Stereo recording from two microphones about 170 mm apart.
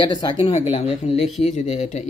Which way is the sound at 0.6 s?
40° left (ahead or behind).